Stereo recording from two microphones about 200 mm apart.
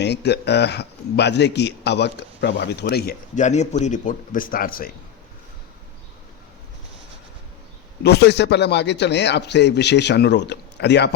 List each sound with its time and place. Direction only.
0.0 s a man's voice: 55° left (ahead or behind)
8.0 s a man's voice: 55° left (ahead or behind)